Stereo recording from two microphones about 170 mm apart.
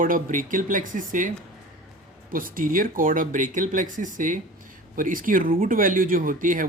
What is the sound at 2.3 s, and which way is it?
Speech, 55° right (ahead or behind).